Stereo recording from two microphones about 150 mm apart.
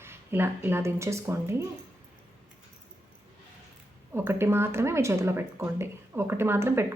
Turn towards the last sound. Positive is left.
turn(degrees=-15)  # may be behind; listen again after turning